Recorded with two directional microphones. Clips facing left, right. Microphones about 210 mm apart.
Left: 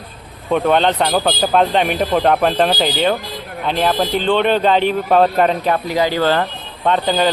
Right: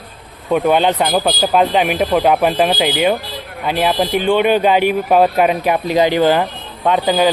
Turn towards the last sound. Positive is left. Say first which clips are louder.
# right 2 dB
turn(degrees=-10)  # may be behind; listen again after turning